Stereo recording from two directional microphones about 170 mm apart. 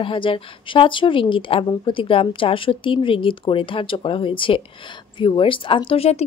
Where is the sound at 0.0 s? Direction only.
30° left (ahead or behind).